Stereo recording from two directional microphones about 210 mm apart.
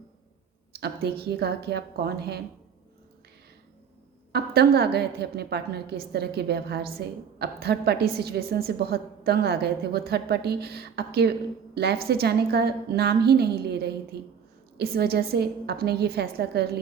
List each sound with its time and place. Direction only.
0.8 s a woman's voice: 50° right (ahead or behind)
4.3 s a woman's voice: 50° right (ahead or behind)